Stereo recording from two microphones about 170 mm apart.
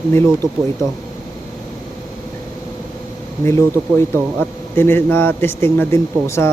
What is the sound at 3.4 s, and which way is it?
Speech, 15° left (ahead or behind).